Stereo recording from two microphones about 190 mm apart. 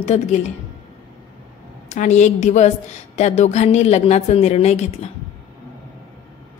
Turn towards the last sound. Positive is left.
turn(degrees=35)  # may be behind; listen again after turning